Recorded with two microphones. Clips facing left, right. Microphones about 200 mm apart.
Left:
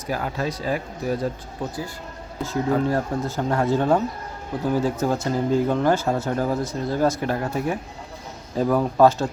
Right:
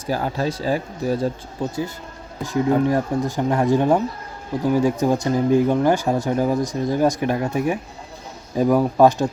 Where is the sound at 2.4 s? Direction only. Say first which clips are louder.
Right 4 dB; 15° right (ahead or behind).